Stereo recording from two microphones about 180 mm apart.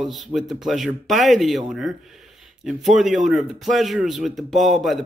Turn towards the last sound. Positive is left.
turn(degrees=0)  # may be behind; listen again after turning